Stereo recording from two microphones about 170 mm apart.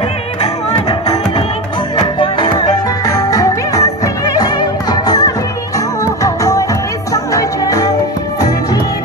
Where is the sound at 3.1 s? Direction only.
20° left (ahead or behind).